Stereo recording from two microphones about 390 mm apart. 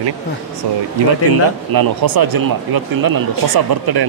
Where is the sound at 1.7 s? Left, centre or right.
Right.